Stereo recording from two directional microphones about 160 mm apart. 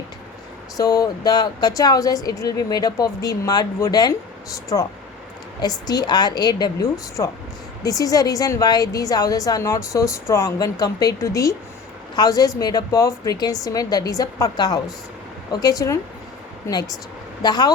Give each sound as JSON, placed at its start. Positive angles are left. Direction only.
{"t": 0.8, "sound": "a woman's voice", "side_deg": 20}
{"t": 16.6, "sound": "a woman's voice", "side_deg": 25}